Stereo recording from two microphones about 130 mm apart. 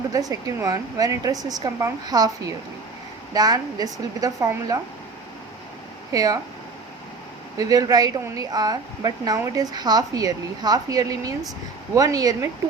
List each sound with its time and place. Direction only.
0.1 s a woman's voice: 25° right (ahead or behind)
6.1 s a woman's voice: 25° right (ahead or behind)
7.6 s a woman's voice: 25° right (ahead or behind)